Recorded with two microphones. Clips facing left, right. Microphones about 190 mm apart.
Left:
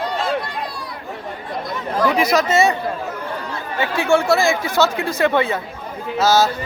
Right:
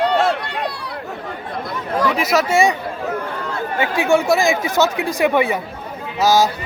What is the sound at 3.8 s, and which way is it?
Speech, 15° right (ahead or behind).